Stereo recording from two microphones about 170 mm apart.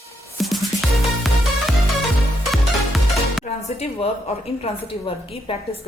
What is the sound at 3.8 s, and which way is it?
Speech, 35° left (ahead or behind).